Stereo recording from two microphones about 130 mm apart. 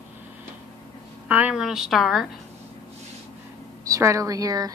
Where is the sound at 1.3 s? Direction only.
10° right (ahead or behind).